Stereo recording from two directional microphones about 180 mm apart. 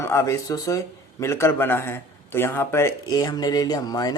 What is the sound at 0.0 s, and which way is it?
A man's voice, 15° left (ahead or behind).